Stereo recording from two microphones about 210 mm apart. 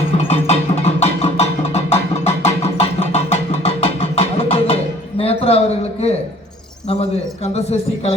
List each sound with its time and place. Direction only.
0.3 s music: 30° left (ahead or behind)
7.4 s speech: 30° left (ahead or behind)